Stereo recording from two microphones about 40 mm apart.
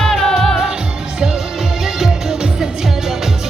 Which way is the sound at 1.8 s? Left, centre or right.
Centre.